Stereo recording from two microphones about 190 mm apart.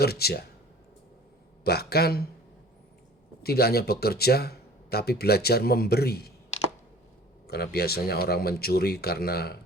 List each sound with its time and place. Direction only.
0.0 s speech: 55° left (ahead or behind)
1.6 s speech: 55° left (ahead or behind)
3.4 s speech: 55° left (ahead or behind)
7.4 s speech: 55° left (ahead or behind)